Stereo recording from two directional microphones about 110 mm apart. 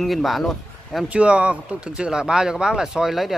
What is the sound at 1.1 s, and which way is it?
Speech, 10° right (ahead or behind).